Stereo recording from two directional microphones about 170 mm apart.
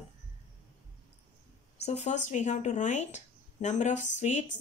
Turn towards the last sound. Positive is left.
turn(degrees=45)  # may be behind; listen again after turning